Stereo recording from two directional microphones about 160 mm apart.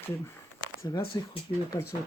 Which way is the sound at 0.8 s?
25° left (ahead or behind).